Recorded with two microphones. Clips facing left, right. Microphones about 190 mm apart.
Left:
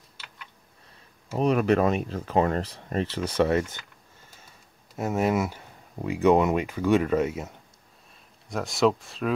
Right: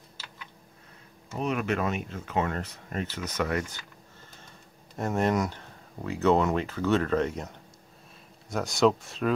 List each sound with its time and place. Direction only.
1.3 s speech: 35° left (ahead or behind)
4.9 s speech: 5° left (ahead or behind)